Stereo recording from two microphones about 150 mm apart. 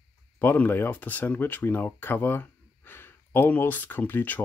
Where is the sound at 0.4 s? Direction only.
15° left (ahead or behind).